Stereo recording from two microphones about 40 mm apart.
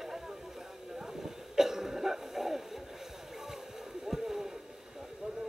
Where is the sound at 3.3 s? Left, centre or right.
Centre.